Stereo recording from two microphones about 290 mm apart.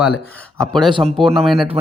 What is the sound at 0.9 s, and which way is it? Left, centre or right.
Speech, centre.